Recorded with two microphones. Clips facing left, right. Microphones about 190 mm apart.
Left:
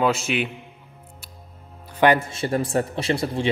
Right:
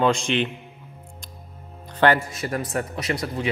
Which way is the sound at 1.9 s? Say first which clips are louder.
Left 1 dB; 15° left (ahead or behind).